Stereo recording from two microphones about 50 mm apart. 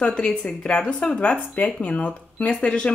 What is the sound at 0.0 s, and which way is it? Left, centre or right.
Speech, centre.